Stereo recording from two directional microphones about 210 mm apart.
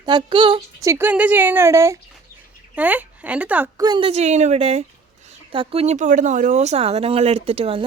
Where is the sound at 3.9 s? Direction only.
25° right (ahead or behind).